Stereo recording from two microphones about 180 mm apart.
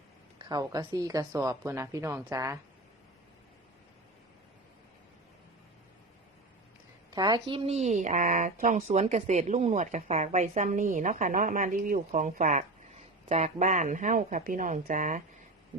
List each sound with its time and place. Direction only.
0.4 s speech: 20° right (ahead or behind)
7.1 s speech: 20° right (ahead or behind); by 15.2 s 45° right (ahead or behind)